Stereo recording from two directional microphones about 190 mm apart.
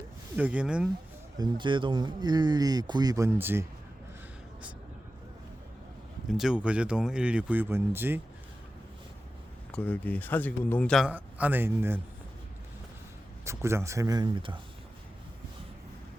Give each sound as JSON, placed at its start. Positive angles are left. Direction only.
{"t": 0.3, "sound": "speech", "side_deg": -5}
{"t": 1.4, "sound": "speech", "side_deg": -25}
{"t": 6.2, "sound": "speech", "side_deg": 0}
{"t": 9.7, "sound": "speech", "side_deg": 10}
{"t": 13.4, "sound": "speech", "side_deg": -15}